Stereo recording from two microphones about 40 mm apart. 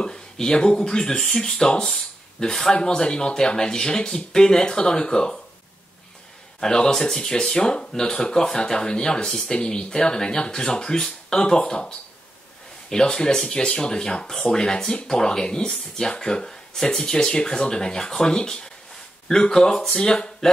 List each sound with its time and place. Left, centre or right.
0.0 s speech: centre
6.6 s speech: centre
12.9 s speech: centre